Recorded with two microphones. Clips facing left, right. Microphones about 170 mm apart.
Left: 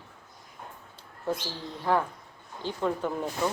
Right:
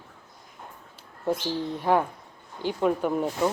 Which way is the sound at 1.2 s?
20° right (ahead or behind).